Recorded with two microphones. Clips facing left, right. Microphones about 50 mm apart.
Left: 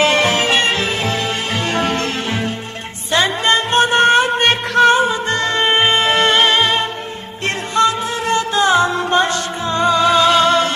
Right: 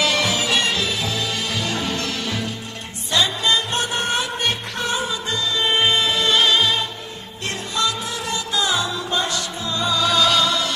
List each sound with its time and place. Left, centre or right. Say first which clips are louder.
0.0 s music: left 6 dB; left